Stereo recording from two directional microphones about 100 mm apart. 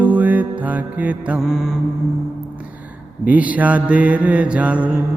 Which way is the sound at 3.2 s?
15° right (ahead or behind).